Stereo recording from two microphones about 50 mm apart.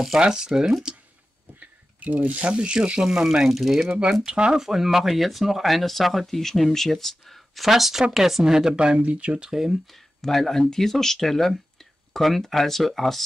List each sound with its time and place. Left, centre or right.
0.2 s speech: centre
1.6 s speech: right; by 4.0 s centre
4.3 s speech: centre
4.6 s speech: centre; by 9.5 s right
9.5 s speech: centre
9.8 s speech: centre